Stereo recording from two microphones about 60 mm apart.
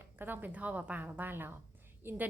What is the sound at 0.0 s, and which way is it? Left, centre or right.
A woman's voice, right.